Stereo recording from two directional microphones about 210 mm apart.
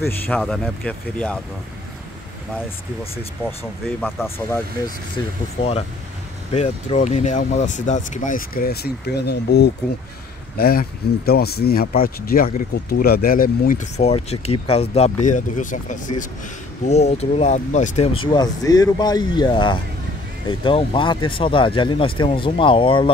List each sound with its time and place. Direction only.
0.0 s speech: 10° left (ahead or behind)
4.0 s speech: 10° left (ahead or behind)
5.6 s speech: 30° left (ahead or behind)